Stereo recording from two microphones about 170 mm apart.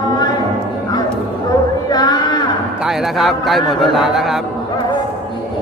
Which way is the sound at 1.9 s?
25° left (ahead or behind).